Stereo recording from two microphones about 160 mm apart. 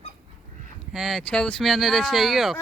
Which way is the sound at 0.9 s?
Centre (ahead or behind).